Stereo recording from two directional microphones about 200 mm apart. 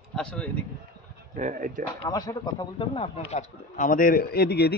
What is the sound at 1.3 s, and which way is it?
Speech, 40° right (ahead or behind).